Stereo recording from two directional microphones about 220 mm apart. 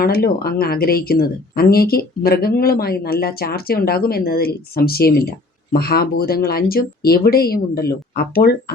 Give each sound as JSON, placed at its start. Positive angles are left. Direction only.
{"t": 0.0, "sound": "speech", "side_deg": 45}